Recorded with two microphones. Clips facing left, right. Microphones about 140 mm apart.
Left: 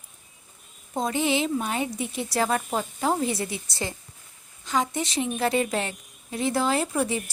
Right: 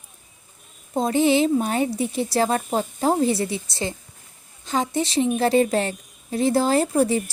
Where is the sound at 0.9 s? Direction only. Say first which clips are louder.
Right 6 dB; 35° right (ahead or behind).